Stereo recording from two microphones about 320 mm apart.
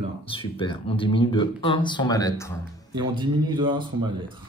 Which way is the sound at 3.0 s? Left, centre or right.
Centre.